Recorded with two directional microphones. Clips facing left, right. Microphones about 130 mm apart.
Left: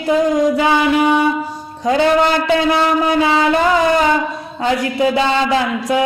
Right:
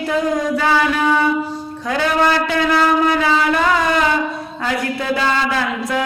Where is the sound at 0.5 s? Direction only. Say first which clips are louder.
Left 3 dB; 15° left (ahead or behind).